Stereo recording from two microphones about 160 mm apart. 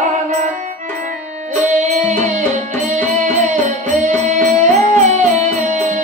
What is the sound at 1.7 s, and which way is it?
Music, 50° right (ahead or behind).